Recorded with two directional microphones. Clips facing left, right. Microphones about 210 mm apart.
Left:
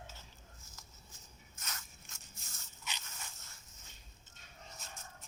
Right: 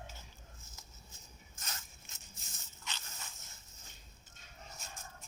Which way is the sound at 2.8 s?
15° left (ahead or behind).